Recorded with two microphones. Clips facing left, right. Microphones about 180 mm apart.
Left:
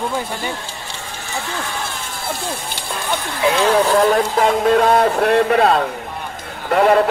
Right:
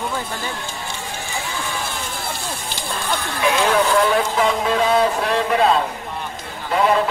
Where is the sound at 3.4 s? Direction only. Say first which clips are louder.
Left 3 dB; 40° left (ahead or behind).